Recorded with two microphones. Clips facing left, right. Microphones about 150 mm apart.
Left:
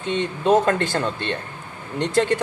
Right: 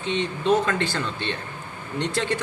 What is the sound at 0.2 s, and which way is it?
Speech, 45° left (ahead or behind).